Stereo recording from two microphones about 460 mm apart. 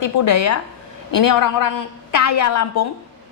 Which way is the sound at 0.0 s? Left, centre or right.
Left.